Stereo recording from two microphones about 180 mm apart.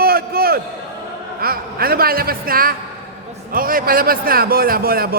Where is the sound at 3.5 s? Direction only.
50° right (ahead or behind).